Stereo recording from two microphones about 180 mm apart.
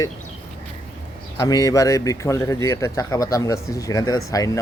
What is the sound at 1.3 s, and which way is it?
Speech, 20° left (ahead or behind).